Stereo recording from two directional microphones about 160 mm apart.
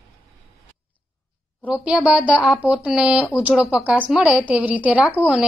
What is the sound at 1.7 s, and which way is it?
A woman's voice, 5° right (ahead or behind).